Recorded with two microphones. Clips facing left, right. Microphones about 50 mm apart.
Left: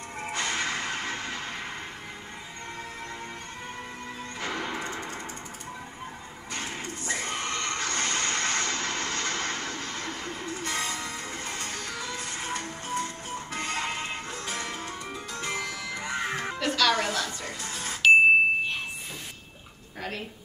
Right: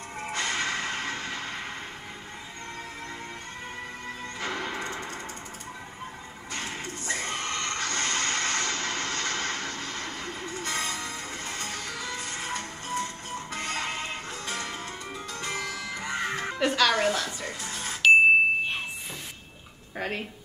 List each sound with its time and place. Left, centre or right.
0.2 s music: centre
4.4 s music: centre
6.5 s a sound: centre
7.8 s vehicle: centre
15.3 s music: centre
16.5 s music: centre